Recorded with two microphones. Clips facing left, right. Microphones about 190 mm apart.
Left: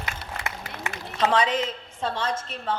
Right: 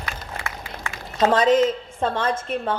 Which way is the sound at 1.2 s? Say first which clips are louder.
Right 6 dB; 45° right (ahead or behind).